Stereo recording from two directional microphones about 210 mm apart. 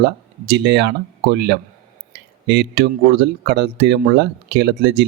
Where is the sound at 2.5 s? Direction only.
55° right (ahead or behind).